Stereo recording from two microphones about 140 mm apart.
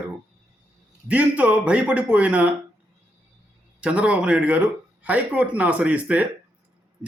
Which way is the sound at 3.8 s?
10° right (ahead or behind).